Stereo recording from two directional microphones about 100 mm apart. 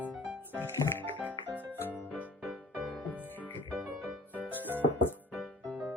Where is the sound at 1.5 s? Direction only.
20° right (ahead or behind).